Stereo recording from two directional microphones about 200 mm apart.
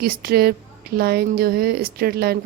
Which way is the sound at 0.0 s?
50° right (ahead or behind).